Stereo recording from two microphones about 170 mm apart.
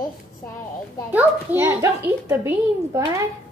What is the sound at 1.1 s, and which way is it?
A child's voice, 10° right (ahead or behind).